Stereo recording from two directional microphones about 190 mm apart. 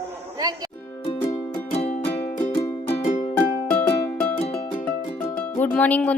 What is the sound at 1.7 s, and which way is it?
Music, 35° left (ahead or behind).